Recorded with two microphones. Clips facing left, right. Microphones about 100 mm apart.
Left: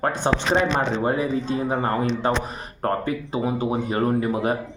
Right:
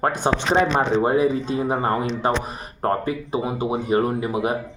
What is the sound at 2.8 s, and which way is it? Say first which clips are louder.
Speech: right 1 dB; 25° right (ahead or behind).